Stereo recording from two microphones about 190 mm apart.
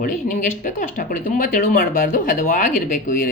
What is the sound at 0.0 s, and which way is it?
Speech, 45° left (ahead or behind).